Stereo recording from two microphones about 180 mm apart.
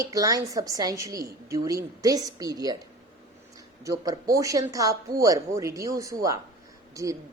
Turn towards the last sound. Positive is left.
turn(degrees=-20)  # may be behind; listen again after turning